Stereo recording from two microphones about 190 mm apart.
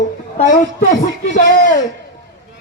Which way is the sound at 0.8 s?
45° left (ahead or behind).